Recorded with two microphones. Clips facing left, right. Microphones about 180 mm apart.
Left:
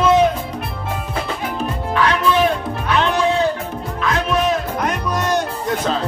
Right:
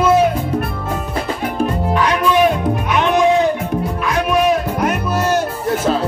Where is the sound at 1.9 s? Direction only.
10° right (ahead or behind).